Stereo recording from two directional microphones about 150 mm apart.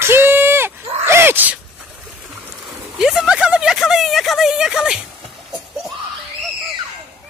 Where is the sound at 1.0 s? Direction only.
15° right (ahead or behind).